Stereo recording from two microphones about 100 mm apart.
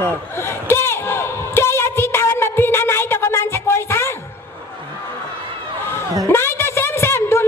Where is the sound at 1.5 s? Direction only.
25° left (ahead or behind).